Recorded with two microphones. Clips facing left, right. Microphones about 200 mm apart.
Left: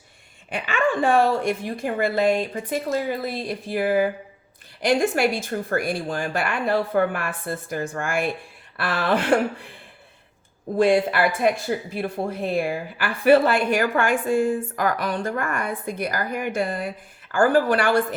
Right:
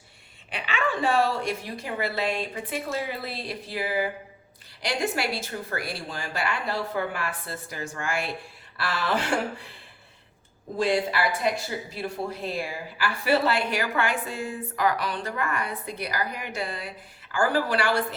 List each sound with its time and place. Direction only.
0.5 s speech: 50° left (ahead or behind)
10.8 s speech: 55° left (ahead or behind)